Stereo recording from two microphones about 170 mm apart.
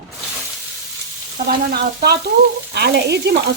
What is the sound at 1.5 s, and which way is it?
Frying, 65° right (ahead or behind).